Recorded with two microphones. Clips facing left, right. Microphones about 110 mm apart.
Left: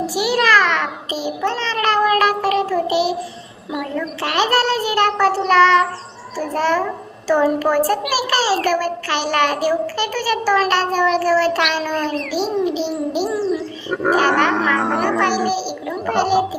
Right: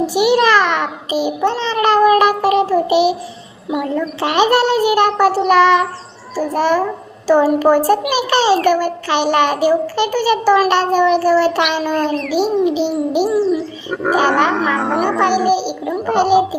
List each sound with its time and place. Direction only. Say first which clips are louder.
0.1 s babbling: right 3 dB; 20° right (ahead or behind)
4.2 s a child's voice: right 4 dB; 15° right (ahead or behind)
5.1 s bird: right 3 dB; 5° right (ahead or behind)
5.5 s a child's voice: even; 15° right (ahead or behind)
12.6 s a child's voice: right 4 dB; 15° right (ahead or behind)
13.3 s bird: right 5 dB; centre (ahead or behind)
14.2 s a child's voice: right 3 dB; 15° right (ahead or behind)
14.8 s bird: right 2 dB; centre (ahead or behind)
15.4 s a child's voice: right 5 dB; 20° right (ahead or behind)